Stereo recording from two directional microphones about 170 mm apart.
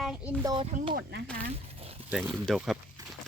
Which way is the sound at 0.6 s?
35° right (ahead or behind).